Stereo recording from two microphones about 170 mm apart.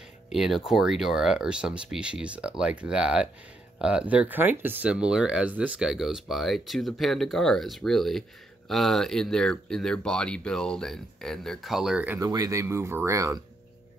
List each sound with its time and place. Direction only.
0.3 s speech: centre (ahead or behind)
12.2 s speech: 20° right (ahead or behind)